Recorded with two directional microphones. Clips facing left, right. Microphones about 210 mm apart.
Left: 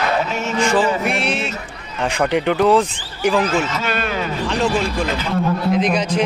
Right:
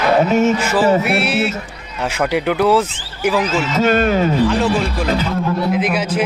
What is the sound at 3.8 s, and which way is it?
Speech, 45° right (ahead or behind).